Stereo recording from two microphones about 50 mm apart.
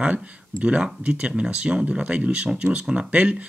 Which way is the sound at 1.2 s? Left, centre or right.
Right.